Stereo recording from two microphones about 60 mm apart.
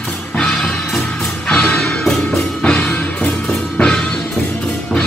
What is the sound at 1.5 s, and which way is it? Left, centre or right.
Music, centre.